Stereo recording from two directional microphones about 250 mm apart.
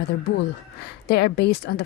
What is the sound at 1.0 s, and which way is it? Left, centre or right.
Speech, left.